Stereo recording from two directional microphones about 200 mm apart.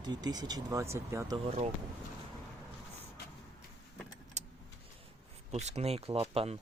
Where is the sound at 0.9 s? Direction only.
15° right (ahead or behind).